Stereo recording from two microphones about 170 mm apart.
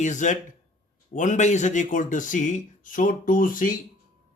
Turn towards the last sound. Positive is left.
turn(degrees=55)  # may be behind; listen again after turning